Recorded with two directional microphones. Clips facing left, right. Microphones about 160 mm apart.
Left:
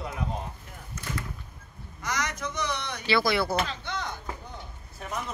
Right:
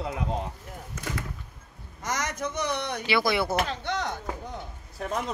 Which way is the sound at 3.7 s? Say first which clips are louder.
Right 4 dB; 70° right (ahead or behind).